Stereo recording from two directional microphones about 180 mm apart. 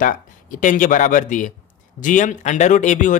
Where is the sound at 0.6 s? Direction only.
45° left (ahead or behind).